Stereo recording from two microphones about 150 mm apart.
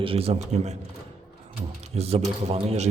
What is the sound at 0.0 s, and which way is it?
Speech, 40° right (ahead or behind).